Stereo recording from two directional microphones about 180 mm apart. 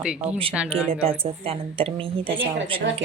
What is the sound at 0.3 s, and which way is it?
A woman's voice, 30° right (ahead or behind).